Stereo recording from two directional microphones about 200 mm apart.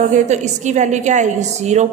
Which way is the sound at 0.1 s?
35° right (ahead or behind).